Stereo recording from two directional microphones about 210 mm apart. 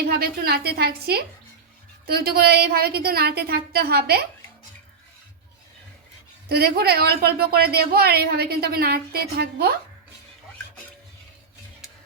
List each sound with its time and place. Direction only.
0.1 s a woman's voice: 50° right (ahead or behind)
6.5 s a woman's voice: 50° right (ahead or behind)